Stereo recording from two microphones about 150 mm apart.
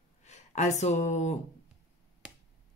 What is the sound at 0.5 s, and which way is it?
Speech, 50° left (ahead or behind).